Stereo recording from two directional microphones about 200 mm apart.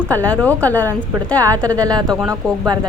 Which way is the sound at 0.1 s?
10° left (ahead or behind).